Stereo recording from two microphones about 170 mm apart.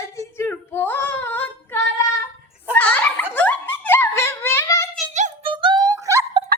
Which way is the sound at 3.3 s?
10° left (ahead or behind).